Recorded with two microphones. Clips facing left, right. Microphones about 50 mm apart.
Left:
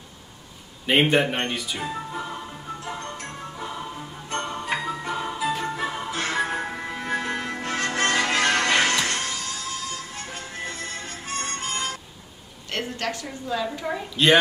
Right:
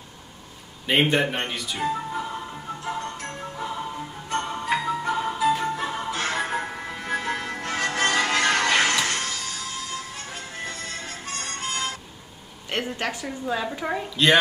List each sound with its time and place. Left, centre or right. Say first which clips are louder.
0.8 s speech: left 1 dB; centre
3.2 s music: right 2 dB; centre
12.7 s a woman's voice: right 1 dB; centre
14.1 s speech: left 1 dB; centre